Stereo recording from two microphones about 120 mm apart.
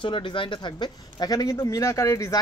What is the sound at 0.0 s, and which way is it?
Speech, 45° left (ahead or behind).